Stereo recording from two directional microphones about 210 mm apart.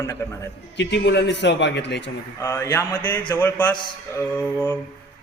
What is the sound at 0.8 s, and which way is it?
A man's voice, 55° left (ahead or behind).